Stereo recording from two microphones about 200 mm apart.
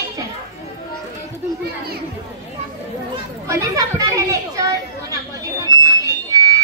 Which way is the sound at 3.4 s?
15° right (ahead or behind).